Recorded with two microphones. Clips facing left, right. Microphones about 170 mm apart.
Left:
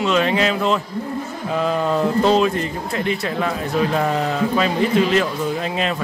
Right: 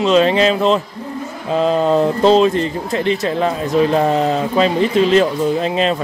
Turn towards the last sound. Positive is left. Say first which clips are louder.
# right 6 dB
turn(degrees=-25)  # may be behind; listen again after turning